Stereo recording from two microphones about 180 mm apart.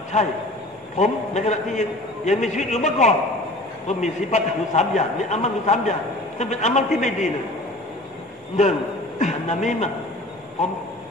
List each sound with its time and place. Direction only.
0.1 s a man's voice: 40° left (ahead or behind)
9.2 s speech: 40° left (ahead or behind)